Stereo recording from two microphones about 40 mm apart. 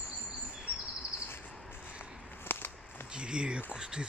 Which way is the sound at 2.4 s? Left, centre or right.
Left.